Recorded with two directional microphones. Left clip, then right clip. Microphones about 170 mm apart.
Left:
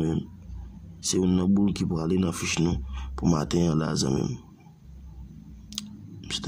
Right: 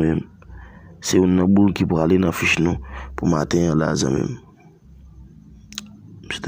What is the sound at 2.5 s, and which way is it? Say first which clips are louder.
Speech: right 7 dB; 10° right (ahead or behind).